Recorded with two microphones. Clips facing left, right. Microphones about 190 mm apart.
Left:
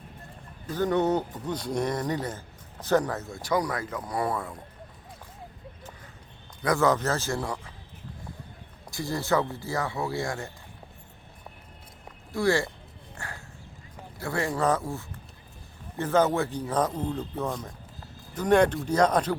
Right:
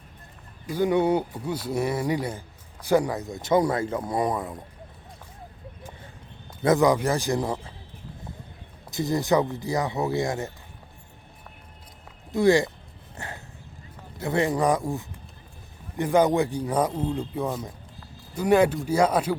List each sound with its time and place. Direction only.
0.7 s speech: 10° right (ahead or behind)
6.6 s speech: 20° right (ahead or behind)
8.9 s speech: 20° right (ahead or behind)
12.3 s speech: 20° right (ahead or behind)
13.1 s dog: 20° right (ahead or behind)
14.2 s speech: 20° right (ahead or behind)